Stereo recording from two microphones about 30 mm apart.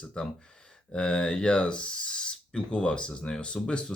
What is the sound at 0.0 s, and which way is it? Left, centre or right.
Speech, left.